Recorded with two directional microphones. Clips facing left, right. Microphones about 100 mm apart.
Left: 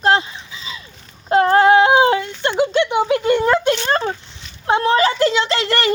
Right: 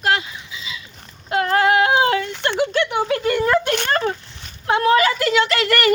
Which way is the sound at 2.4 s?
20° left (ahead or behind).